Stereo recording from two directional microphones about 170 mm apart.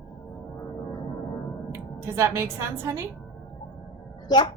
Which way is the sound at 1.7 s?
15° right (ahead or behind).